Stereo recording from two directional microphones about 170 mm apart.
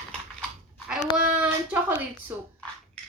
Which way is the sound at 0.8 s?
5° right (ahead or behind).